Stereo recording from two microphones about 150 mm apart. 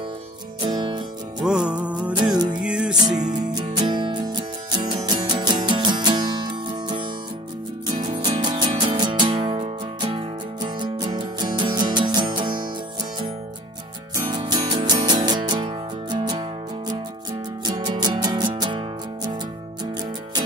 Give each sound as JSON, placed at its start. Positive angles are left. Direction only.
{"t": 0.6, "sound": "music", "side_deg": -30}
{"t": 1.4, "sound": "music", "side_deg": -5}
{"t": 3.5, "sound": "music", "side_deg": -30}
{"t": 8.2, "sound": "music", "side_deg": -30}
{"t": 14.1, "sound": "music", "side_deg": -30}